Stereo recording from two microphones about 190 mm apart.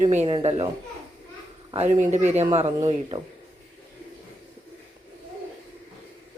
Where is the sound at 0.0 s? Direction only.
35° right (ahead or behind).